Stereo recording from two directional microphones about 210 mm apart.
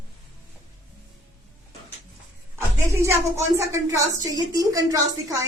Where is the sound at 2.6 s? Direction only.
10° right (ahead or behind).